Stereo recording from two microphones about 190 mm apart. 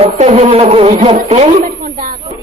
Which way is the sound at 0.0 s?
35° right (ahead or behind).